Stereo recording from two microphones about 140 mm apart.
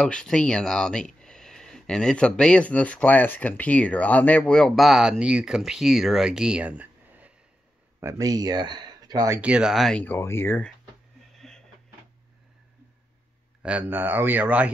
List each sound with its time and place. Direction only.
0.0 s speech: 5° left (ahead or behind); by 7.3 s 10° right (ahead or behind)
8.0 s speech: 20° right (ahead or behind)
9.4 s speech: 5° right (ahead or behind)
10.0 s speech: 15° left (ahead or behind)
11.3 s music: 5° left (ahead or behind)
13.6 s speech: 10° right (ahead or behind)